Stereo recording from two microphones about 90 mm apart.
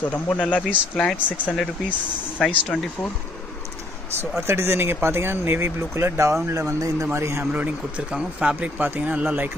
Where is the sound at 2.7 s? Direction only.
10° left (ahead or behind).